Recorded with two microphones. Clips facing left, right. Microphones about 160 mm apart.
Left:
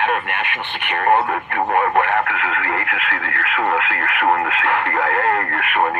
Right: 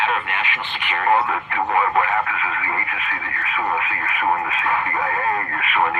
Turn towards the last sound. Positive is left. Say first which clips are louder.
# left 2 dB
turn(degrees=60)  # may be behind; listen again after turning